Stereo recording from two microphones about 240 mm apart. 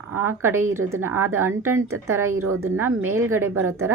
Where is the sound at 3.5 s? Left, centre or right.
Right.